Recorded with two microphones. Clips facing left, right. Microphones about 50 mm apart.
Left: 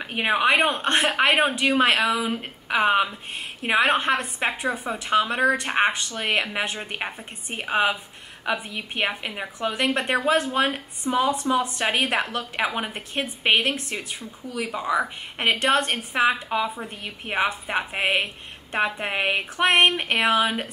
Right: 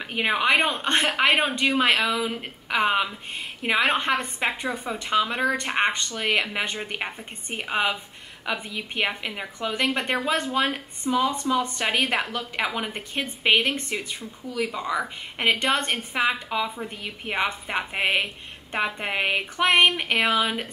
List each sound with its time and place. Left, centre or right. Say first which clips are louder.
0.0 s a woman's voice: left 2 dB; centre
2.0 s a woman's voice: left 2 dB; centre
2.3 s a woman's voice: left 2 dB; centre
11.1 s speech: left 1 dB; left
11.5 s a woman's voice: left 1 dB; centre
14.7 s a woman's voice: left 3 dB; centre